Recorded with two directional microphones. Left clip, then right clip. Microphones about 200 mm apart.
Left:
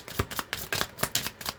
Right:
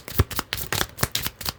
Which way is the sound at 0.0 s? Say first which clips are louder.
Right 4 dB; 45° right (ahead or behind).